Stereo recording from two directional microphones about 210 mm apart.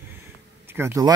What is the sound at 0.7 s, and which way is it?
Speech, 10° right (ahead or behind).